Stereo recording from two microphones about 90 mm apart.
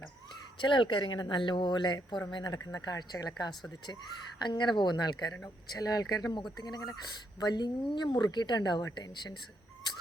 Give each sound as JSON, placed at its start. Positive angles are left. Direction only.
{"t": 0.6, "sound": "speech", "side_deg": 65}